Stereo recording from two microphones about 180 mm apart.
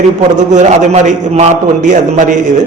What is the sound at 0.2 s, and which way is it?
A man's voice, 40° right (ahead or behind).